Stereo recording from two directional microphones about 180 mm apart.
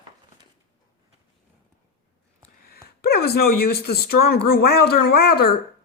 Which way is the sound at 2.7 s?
60° left (ahead or behind).